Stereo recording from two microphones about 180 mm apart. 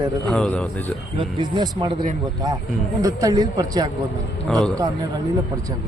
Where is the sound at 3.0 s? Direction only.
20° right (ahead or behind).